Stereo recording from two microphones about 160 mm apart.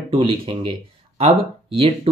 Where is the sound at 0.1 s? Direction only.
30° right (ahead or behind).